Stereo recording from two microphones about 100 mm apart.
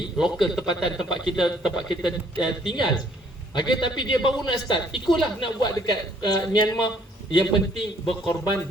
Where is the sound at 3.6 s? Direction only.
50° left (ahead or behind).